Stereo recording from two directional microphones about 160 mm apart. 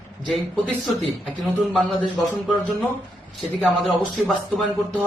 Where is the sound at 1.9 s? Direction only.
30° left (ahead or behind).